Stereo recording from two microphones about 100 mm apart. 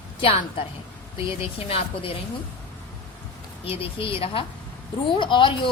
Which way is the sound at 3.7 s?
65° left (ahead or behind).